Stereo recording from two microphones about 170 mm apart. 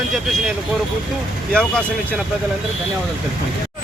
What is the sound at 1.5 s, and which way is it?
Speech, 5° left (ahead or behind).